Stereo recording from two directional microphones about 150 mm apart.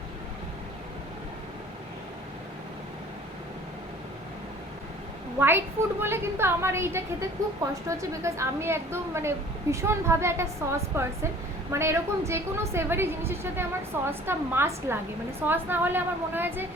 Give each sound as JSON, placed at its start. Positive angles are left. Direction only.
{"t": 5.4, "sound": "a woman's voice", "side_deg": -15}